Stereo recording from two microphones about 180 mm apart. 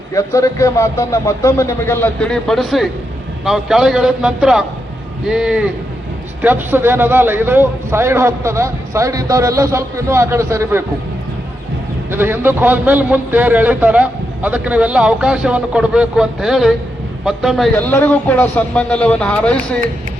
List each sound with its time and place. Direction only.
0.1 s a man's voice: 15° left (ahead or behind); by 10.8 s 15° right (ahead or behind)
12.1 s a man's voice: 10° right (ahead or behind)
17.7 s speech: 10° left (ahead or behind)